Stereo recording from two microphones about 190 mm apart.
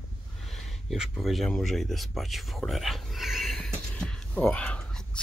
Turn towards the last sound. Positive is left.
turn(degrees=5)  # may be behind; listen again after turning